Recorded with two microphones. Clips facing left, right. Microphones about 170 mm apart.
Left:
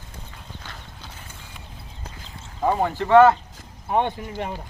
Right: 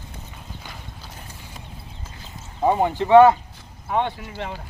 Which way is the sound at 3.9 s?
20° left (ahead or behind).